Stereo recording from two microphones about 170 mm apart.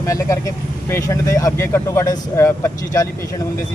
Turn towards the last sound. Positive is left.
turn(degrees=15)  # may be behind; listen again after turning